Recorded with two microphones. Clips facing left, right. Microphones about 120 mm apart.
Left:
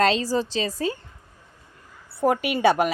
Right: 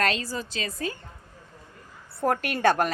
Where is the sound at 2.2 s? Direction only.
5° left (ahead or behind).